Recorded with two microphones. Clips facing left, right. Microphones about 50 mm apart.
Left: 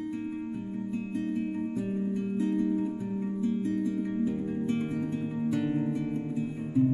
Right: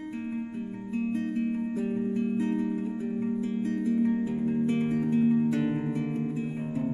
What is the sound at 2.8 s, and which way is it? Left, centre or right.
Music, centre.